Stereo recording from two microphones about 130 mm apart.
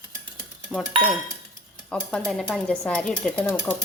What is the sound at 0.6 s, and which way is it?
Speech, 5° left (ahead or behind).